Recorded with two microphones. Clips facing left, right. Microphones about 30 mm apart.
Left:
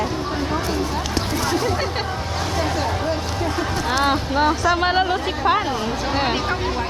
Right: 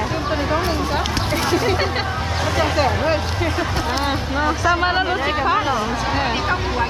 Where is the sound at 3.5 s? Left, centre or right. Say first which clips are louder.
Even; right.